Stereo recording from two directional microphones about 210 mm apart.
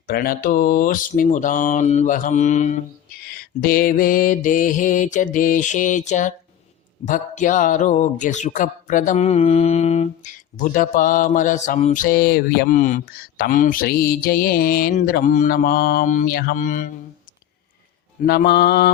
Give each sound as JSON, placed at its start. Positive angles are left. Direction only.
{"t": 0.1, "sound": "mantra", "side_deg": 45}
{"t": 3.2, "sound": "mantra", "side_deg": 45}
{"t": 18.2, "sound": "mantra", "side_deg": 50}